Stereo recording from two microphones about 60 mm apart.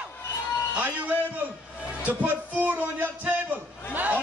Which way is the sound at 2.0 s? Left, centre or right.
Right.